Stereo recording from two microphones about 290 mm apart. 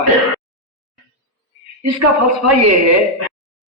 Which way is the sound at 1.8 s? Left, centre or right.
Right.